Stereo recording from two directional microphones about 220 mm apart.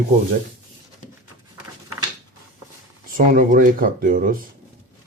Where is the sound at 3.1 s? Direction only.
40° right (ahead or behind).